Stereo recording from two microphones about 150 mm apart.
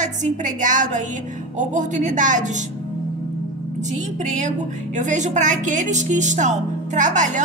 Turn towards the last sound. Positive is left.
turn(degrees=-55)  # may be behind; listen again after turning